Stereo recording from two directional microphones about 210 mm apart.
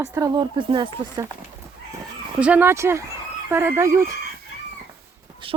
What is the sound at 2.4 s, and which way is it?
A woman's voice, 5° right (ahead or behind).